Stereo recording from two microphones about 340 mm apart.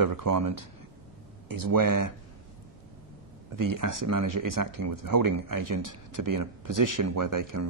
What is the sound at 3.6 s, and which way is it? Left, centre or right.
Speech, right.